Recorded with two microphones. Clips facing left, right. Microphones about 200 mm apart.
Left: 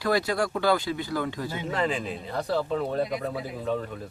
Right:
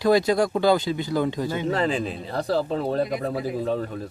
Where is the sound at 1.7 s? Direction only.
35° right (ahead or behind).